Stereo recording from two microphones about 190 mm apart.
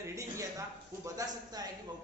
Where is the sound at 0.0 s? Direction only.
15° right (ahead or behind).